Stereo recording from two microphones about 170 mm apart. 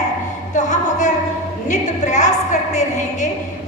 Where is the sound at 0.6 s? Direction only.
45° left (ahead or behind).